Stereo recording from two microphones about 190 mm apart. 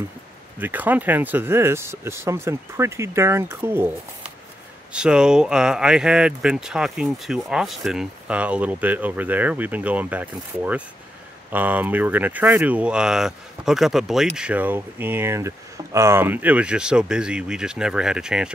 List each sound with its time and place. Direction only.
0.6 s speech: 10° right (ahead or behind)